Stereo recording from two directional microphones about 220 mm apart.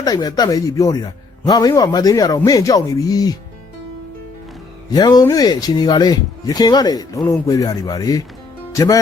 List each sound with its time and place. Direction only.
0.0 s speech: 15° left (ahead or behind)
4.9 s speech: 20° left (ahead or behind)